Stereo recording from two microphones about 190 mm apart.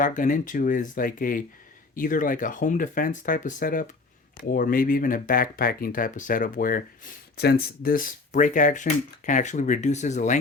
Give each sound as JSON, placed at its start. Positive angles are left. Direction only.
{"t": 0.0, "sound": "speech", "side_deg": 45}